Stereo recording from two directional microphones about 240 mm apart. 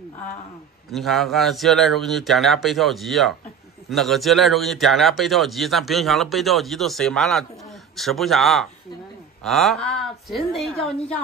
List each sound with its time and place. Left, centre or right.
0.9 s a man's voice: centre